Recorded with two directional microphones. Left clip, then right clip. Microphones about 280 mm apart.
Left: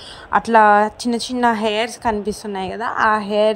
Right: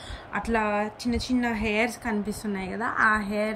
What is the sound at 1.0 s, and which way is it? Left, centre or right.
A woman's voice, centre.